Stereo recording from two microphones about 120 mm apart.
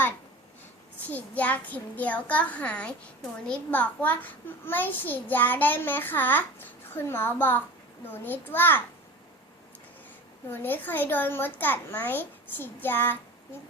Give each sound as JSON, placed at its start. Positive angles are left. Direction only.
{"t": 1.0, "sound": "a child's voice", "side_deg": 15}
{"t": 10.5, "sound": "a child's voice", "side_deg": 15}